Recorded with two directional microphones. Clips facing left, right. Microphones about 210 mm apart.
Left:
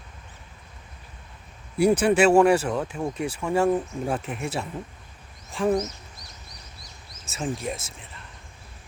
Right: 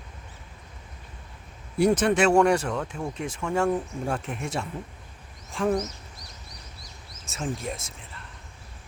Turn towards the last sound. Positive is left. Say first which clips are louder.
# left 2 dB
turn(degrees=5)  # may be behind; listen again after turning